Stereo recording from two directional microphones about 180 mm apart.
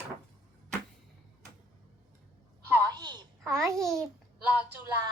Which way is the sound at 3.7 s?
Centre (ahead or behind).